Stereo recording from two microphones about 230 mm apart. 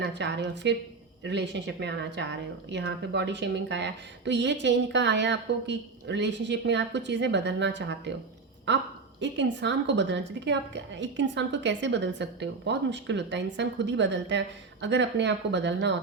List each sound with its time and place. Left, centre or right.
0.0 s a woman's voice: right